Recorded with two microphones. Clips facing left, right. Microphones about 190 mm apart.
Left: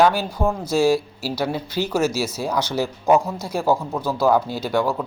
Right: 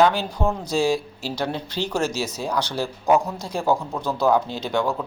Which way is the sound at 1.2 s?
10° left (ahead or behind).